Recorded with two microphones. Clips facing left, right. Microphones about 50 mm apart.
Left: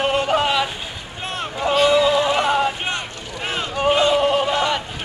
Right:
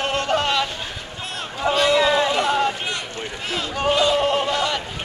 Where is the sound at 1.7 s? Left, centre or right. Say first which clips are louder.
Left 2 dB; centre.